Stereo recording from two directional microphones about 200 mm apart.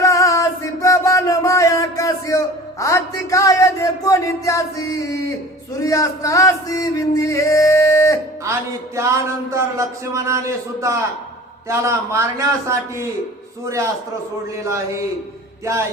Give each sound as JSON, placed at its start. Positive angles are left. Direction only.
{"t": 0.0, "sound": "music", "side_deg": 15}
{"t": 8.5, "sound": "a man's voice", "side_deg": -15}
{"t": 15.6, "sound": "a man's voice", "side_deg": -15}